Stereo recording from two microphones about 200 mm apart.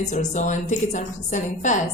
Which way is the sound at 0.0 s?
35° left (ahead or behind).